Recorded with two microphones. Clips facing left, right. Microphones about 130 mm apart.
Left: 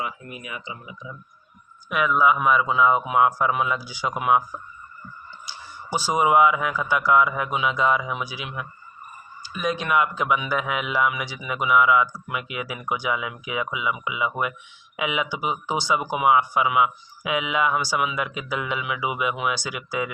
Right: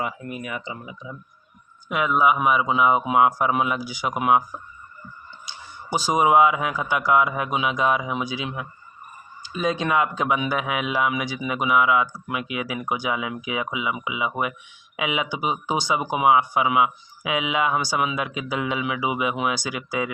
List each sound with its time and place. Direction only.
0.0 s speech: 55° right (ahead or behind)
1.9 s a man's voice: 25° right (ahead or behind)
5.5 s speech: 15° right (ahead or behind)